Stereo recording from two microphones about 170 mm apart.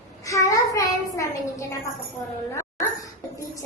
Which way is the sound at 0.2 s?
20° left (ahead or behind).